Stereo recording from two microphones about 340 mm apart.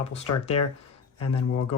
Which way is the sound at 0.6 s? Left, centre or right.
Left.